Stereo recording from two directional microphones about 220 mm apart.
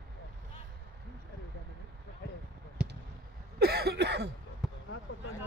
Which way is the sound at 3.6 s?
45° right (ahead or behind).